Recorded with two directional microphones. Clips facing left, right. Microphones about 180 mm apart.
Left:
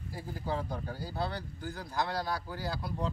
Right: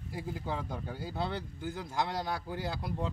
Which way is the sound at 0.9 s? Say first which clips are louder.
Right 2 dB; 20° right (ahead or behind).